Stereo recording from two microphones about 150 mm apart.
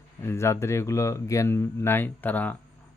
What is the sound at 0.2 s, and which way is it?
Speech, 15° left (ahead or behind).